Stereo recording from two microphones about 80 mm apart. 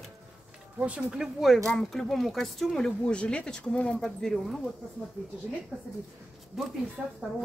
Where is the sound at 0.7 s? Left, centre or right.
Centre.